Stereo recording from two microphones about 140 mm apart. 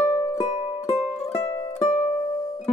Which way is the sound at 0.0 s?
25° left (ahead or behind).